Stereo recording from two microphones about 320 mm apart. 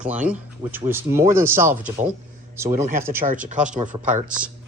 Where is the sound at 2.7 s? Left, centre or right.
Right.